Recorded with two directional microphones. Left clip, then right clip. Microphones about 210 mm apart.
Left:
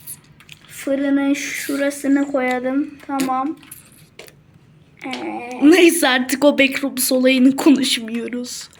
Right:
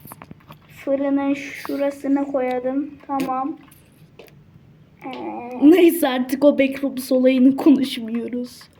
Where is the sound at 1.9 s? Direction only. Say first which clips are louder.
Left 4 dB; 55° left (ahead or behind).